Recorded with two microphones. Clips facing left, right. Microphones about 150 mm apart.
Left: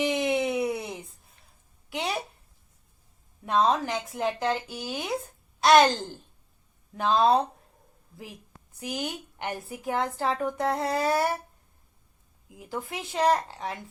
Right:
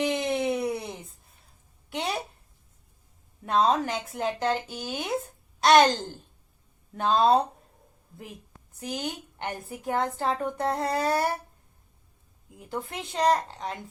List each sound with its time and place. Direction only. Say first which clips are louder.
0.0 s a sound: left 1 dB; centre (ahead or behind)
3.4 s speech: even; centre (ahead or behind)
12.5 s speech: even; 5° left (ahead or behind)